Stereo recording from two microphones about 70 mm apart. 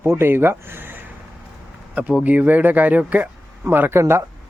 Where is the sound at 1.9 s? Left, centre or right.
Right.